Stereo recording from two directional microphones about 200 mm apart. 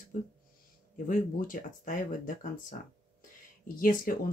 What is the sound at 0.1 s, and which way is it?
Speech, 40° left (ahead or behind).